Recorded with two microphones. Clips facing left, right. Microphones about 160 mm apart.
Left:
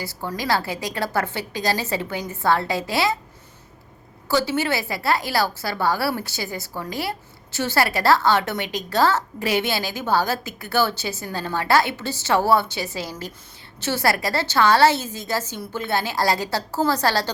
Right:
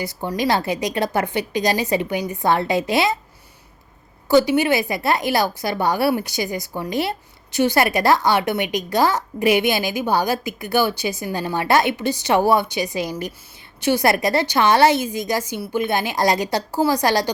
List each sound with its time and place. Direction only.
0.0 s a woman's voice: 20° right (ahead or behind)
4.3 s a woman's voice: 15° right (ahead or behind)